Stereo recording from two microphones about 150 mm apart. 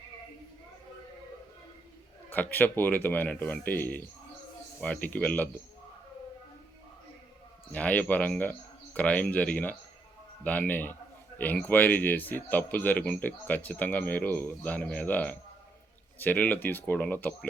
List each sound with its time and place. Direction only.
2.3 s speech: 10° left (ahead or behind)
7.7 s speech: 10° left (ahead or behind)